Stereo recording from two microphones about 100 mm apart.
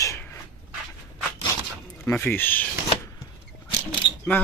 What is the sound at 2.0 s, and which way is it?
Speech, 20° left (ahead or behind).